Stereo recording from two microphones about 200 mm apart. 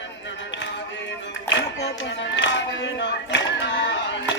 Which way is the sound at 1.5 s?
60° left (ahead or behind).